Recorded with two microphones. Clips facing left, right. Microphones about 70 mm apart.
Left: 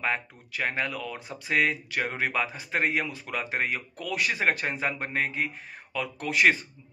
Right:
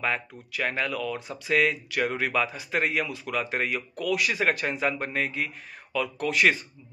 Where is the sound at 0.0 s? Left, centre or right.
Left.